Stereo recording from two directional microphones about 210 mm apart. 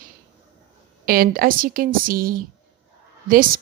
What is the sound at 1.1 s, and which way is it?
A woman's voice, 45° right (ahead or behind).